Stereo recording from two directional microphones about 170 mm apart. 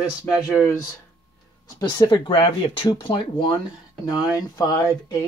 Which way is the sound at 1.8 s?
25° left (ahead or behind).